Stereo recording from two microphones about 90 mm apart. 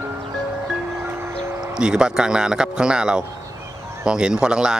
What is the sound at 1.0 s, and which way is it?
Music, 25° right (ahead or behind).